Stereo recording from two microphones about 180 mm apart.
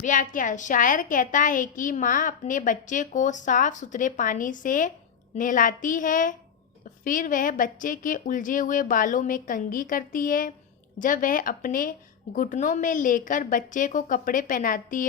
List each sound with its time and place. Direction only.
0.0 s a woman's voice: 45° left (ahead or behind)